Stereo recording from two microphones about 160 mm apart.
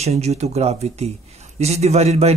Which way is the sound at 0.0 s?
40° right (ahead or behind).